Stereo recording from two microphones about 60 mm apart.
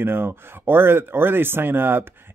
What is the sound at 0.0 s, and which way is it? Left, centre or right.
Speech, right.